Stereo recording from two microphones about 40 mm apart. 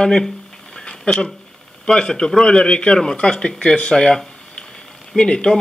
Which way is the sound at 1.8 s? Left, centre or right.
Centre.